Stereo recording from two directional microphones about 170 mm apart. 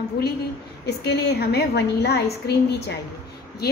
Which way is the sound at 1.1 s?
75° left (ahead or behind).